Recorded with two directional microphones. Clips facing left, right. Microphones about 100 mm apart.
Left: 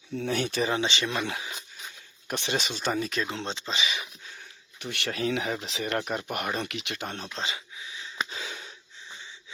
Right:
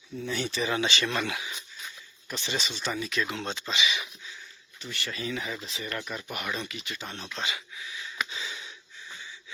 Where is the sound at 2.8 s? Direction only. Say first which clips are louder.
Left 1 dB; 45° left (ahead or behind).